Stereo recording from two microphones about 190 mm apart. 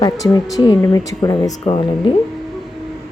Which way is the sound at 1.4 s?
35° left (ahead or behind).